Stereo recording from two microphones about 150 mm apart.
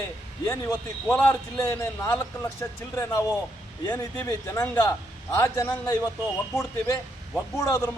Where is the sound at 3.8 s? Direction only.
15° left (ahead or behind).